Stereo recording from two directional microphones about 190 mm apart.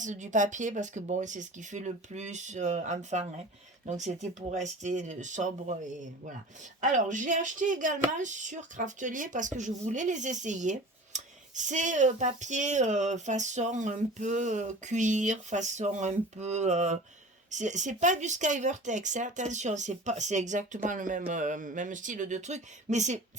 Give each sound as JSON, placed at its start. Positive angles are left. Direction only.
{"t": 0.0, "sound": "speech", "side_deg": -40}